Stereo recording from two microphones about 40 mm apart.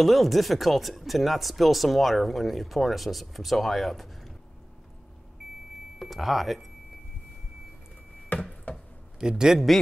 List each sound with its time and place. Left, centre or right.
0.0 s speech: centre
5.9 s speech: centre
9.4 s speech: centre